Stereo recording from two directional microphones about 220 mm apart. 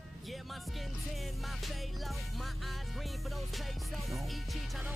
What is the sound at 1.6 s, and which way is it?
Music, centre (ahead or behind).